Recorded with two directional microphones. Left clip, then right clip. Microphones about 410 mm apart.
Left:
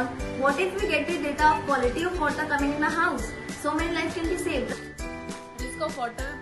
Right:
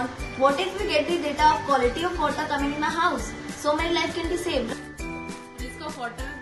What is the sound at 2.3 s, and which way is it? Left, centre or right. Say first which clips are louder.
Speech: even; centre.